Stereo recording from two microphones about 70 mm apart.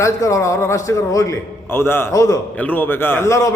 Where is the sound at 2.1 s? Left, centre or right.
Left.